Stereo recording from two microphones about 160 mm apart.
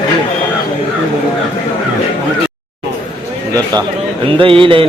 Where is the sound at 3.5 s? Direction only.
25° right (ahead or behind).